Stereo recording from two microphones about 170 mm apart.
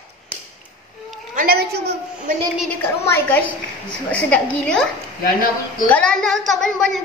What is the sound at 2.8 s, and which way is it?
A woman's voice, 10° left (ahead or behind).